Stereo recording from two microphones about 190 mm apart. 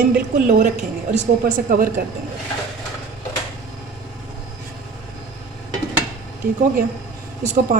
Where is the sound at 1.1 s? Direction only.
45° right (ahead or behind).